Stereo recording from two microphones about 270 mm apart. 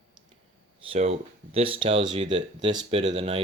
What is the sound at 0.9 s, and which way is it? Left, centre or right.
Speech, right.